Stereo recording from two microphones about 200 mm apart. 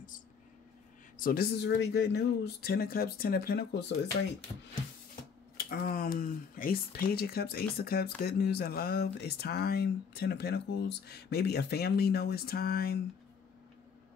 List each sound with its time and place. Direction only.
1.1 s speech: 45° left (ahead or behind)
5.6 s speech: 50° left (ahead or behind)